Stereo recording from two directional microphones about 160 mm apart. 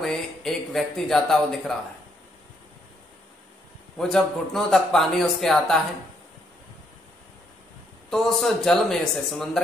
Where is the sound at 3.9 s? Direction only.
Centre (ahead or behind).